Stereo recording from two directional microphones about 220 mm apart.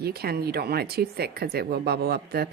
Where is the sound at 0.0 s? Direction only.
45° right (ahead or behind).